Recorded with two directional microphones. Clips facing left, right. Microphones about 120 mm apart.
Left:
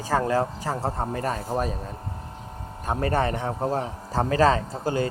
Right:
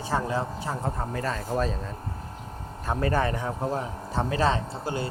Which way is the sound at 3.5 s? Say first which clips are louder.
Left 3 dB; 40° left (ahead or behind).